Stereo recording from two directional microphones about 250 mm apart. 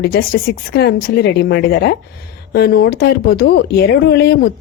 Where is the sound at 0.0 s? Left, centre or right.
Left.